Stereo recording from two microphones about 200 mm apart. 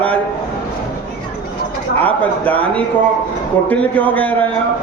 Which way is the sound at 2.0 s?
10° left (ahead or behind).